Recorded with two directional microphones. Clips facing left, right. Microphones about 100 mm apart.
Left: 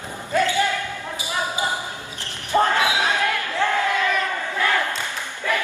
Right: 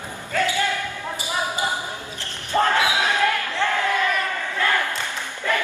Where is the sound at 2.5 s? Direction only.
15° left (ahead or behind).